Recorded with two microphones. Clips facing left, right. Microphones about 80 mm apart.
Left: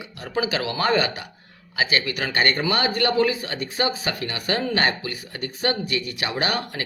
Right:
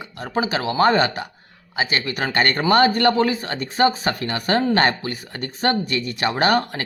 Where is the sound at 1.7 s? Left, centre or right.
Right.